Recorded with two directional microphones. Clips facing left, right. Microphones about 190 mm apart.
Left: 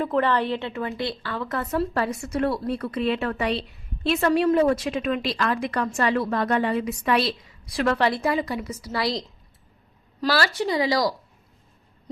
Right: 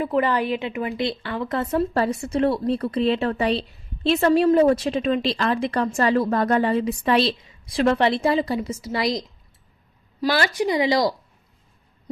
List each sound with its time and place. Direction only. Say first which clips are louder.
0.0 s a woman's voice: right 1 dB; 10° right (ahead or behind)